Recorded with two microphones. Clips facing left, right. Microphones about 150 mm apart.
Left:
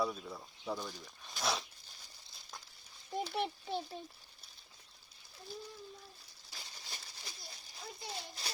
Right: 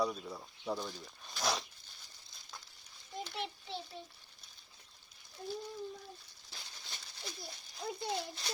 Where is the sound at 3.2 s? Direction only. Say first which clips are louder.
Left 4 dB; 45° left (ahead or behind).